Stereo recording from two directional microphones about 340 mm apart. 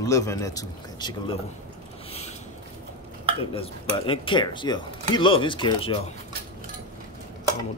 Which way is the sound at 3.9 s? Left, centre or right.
Centre.